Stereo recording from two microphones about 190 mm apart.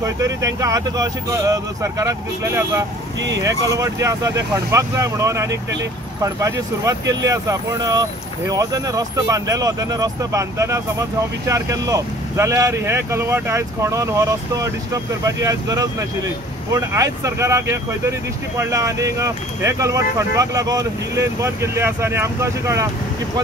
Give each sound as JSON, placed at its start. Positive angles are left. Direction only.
{"t": 0.0, "sound": "speech", "side_deg": -15}